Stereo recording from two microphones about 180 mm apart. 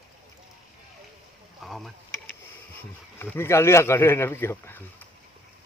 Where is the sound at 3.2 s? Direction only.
15° left (ahead or behind).